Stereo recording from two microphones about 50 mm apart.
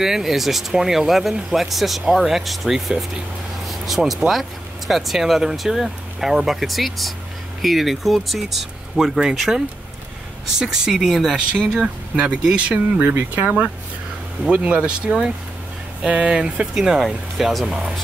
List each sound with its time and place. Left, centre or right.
0.0 s speech: centre
3.6 s vehicle: centre
4.3 s speech: centre
10.6 s speech: centre
11.8 s speech: right
12.7 s speech: right
14.4 s speech: right
16.7 s speech: centre